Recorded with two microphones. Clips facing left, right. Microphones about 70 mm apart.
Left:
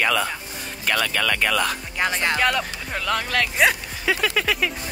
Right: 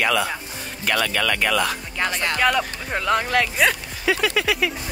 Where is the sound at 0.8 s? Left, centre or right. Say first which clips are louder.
Right 1 dB; right.